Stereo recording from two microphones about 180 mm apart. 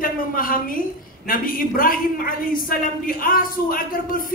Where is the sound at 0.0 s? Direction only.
50° left (ahead or behind).